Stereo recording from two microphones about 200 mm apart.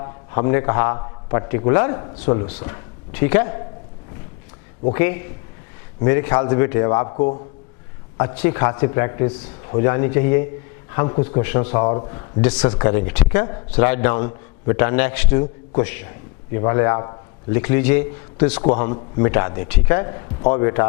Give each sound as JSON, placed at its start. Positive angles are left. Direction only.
{"t": 0.0, "sound": "a man's voice", "side_deg": 20}
{"t": 4.9, "sound": "a man's voice", "side_deg": 15}
{"t": 8.4, "sound": "a man's voice", "side_deg": 15}
{"t": 11.4, "sound": "a man's voice", "side_deg": 15}
{"t": 12.8, "sound": "a man's voice", "side_deg": 15}
{"t": 18.8, "sound": "a man's voice", "side_deg": 20}